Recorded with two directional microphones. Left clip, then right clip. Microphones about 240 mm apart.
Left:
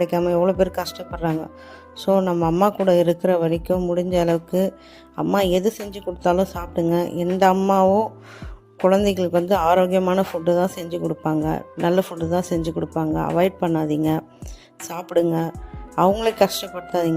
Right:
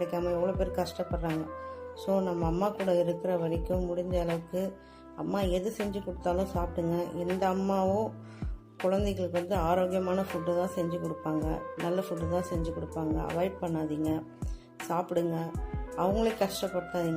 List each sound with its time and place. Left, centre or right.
0.0 s speech: left
14.8 s speech: centre
15.1 s speech: left